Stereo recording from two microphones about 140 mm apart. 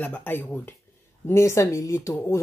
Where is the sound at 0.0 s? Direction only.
15° left (ahead or behind).